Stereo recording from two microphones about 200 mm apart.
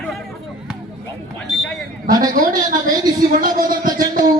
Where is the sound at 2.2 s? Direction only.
40° right (ahead or behind).